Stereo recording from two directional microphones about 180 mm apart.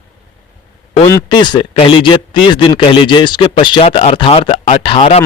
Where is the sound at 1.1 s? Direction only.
25° left (ahead or behind).